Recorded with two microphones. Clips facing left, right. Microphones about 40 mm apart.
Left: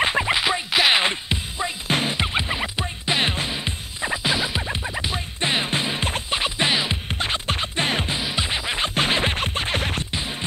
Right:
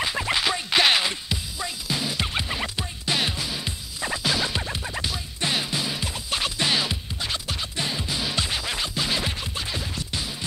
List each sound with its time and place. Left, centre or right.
0.2 s music: centre
1.0 s music: left
1.9 s music: left
2.1 s music: left
5.1 s music: left
6.3 s music: left
7.1 s music: left
8.2 s music: centre
8.8 s scratch: left